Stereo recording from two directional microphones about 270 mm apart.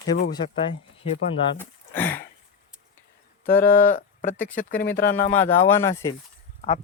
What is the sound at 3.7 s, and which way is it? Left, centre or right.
Speech, left.